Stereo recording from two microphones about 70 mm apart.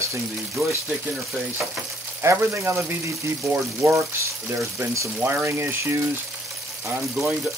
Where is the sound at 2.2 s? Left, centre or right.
Right.